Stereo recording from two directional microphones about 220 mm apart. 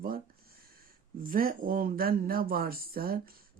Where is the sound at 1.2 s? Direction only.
40° right (ahead or behind).